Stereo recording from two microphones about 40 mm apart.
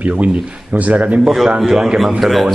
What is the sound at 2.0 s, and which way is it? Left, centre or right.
Speech, centre.